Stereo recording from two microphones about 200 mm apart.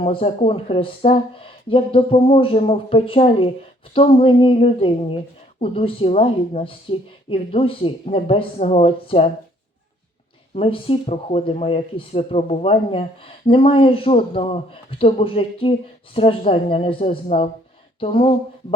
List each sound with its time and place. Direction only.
0.0 s speech: 25° left (ahead or behind)
10.5 s speech: 30° left (ahead or behind)